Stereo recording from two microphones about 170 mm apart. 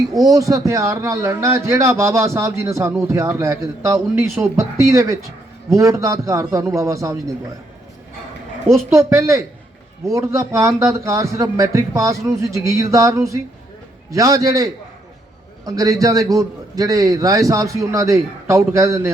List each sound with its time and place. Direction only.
0.1 s a man's voice: 20° right (ahead or behind)
8.7 s a man's voice: 15° right (ahead or behind)